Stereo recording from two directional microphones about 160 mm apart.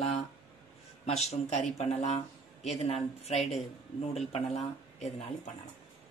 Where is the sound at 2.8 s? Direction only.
40° left (ahead or behind).